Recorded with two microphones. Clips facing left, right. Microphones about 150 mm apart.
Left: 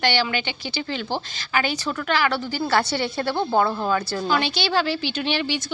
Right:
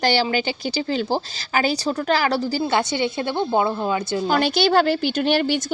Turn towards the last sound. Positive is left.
turn(degrees=-50)  # may be behind; listen again after turning